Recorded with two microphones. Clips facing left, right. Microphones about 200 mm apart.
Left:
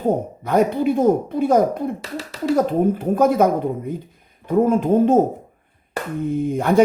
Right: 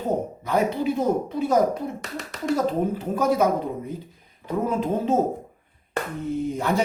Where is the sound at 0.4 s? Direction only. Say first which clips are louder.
Left 6 dB; 55° left (ahead or behind).